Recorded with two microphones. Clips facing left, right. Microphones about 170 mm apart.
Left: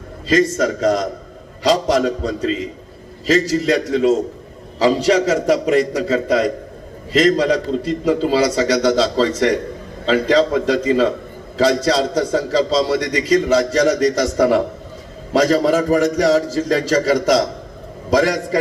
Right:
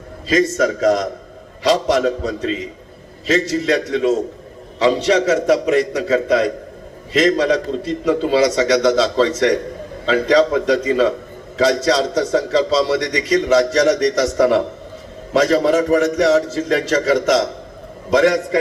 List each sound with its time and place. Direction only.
0.5 s a man's voice: 30° left (ahead or behind)
4.8 s a man's voice: 30° left (ahead or behind)